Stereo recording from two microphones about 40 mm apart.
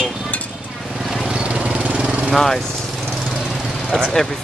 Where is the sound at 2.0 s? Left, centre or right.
Centre.